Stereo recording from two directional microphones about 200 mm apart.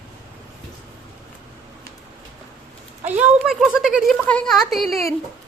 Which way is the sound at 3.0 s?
10° right (ahead or behind).